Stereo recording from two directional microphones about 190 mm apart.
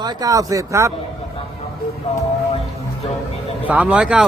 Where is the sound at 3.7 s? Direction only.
5° right (ahead or behind).